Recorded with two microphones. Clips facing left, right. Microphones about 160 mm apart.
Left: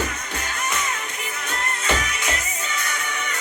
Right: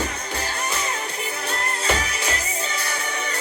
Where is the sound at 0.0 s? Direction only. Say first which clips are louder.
Right 1 dB; 35° right (ahead or behind).